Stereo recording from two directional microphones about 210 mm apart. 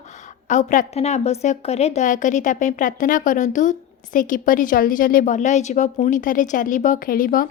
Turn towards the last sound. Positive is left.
turn(degrees=40)  # may be behind; listen again after turning